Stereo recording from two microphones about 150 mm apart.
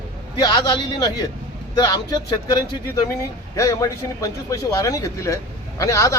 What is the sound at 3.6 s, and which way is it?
A man's voice, 20° left (ahead or behind).